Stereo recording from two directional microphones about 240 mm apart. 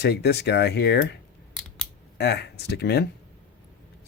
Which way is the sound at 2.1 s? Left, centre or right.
Left.